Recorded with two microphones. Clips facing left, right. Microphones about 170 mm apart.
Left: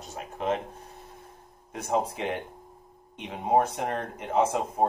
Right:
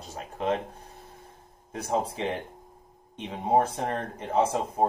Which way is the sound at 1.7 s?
30° right (ahead or behind).